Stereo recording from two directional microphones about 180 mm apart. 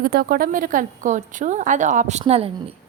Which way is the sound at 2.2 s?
30° right (ahead or behind).